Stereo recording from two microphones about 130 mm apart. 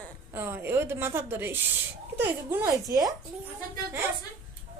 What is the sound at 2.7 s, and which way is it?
Speech, 25° right (ahead or behind).